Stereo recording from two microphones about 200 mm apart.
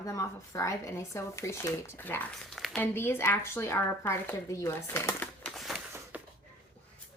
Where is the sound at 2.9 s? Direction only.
10° left (ahead or behind).